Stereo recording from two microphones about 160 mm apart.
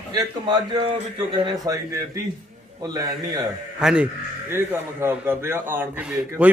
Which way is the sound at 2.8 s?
25° right (ahead or behind).